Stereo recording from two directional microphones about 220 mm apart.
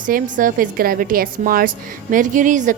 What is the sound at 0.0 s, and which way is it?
A woman's voice, 40° right (ahead or behind).